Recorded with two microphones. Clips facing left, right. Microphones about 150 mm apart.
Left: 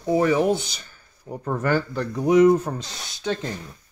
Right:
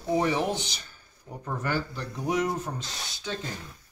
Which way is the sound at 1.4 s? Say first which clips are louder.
Left 7 dB; 65° left (ahead or behind).